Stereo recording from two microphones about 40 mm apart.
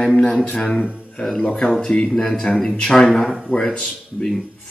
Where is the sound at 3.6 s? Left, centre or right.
Left.